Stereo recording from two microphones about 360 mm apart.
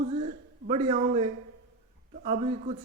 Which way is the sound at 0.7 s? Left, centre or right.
Centre.